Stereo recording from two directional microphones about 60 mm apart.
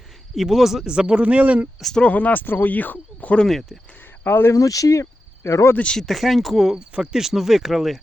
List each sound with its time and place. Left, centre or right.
0.3 s speech: centre; by 1.6 s right
2.0 s speech: left
3.4 s speech: centre
4.3 s speech: left
4.5 s speech: left
5.7 s speech: centre
6.0 s speech: centre
6.7 s speech: centre